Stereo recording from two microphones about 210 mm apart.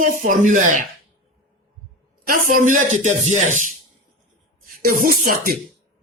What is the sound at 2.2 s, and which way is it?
Speech, 40° right (ahead or behind).